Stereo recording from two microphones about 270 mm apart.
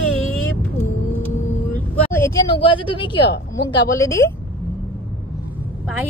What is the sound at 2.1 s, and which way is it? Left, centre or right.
Speech, centre.